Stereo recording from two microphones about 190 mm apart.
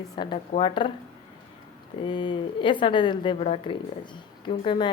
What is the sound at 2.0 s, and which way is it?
Speech, 25° left (ahead or behind).